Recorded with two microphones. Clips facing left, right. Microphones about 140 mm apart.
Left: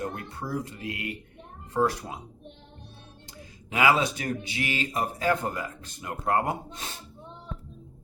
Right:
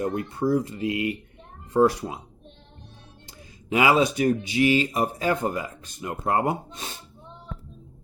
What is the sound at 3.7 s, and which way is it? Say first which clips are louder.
Speech: right 3 dB; 15° right (ahead or behind).